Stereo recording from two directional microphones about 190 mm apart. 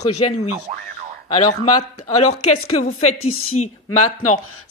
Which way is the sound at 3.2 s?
90° left.